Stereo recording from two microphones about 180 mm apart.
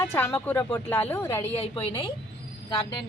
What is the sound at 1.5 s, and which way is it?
Speech, 30° left (ahead or behind).